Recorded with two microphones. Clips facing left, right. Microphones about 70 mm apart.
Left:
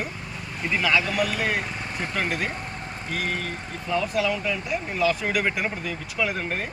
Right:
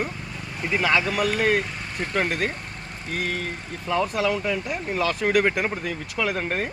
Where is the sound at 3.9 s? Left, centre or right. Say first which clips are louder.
Right 1 dB; right.